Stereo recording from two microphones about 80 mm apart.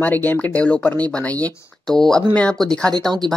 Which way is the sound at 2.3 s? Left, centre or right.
Centre.